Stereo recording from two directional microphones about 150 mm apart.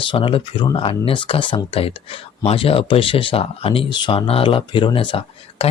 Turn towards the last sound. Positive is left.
turn(degrees=35)  # may be behind; listen again after turning